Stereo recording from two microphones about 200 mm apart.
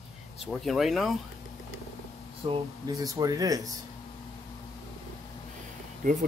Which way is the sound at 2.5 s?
20° right (ahead or behind).